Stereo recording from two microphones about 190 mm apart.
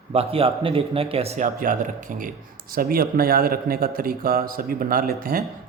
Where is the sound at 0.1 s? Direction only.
30° right (ahead or behind).